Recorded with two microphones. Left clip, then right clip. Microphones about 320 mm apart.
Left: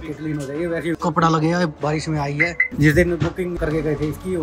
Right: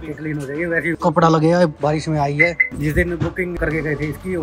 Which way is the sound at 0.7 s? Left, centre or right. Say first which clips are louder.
Right 6 dB; centre.